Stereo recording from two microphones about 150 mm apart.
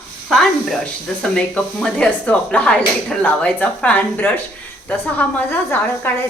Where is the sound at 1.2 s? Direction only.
5° left (ahead or behind).